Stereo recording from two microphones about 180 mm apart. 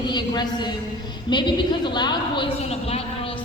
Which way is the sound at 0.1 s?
25° left (ahead or behind).